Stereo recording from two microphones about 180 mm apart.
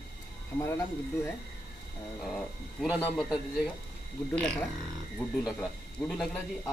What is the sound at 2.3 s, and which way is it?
Speech, centre (ahead or behind).